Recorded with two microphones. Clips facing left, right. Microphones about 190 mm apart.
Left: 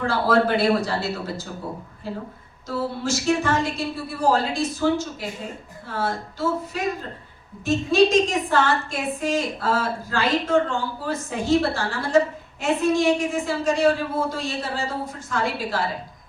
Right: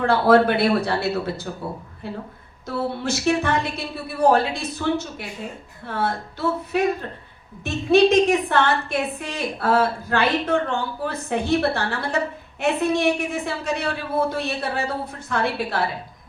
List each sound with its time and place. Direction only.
0.0 s a woman's voice: 60° right (ahead or behind)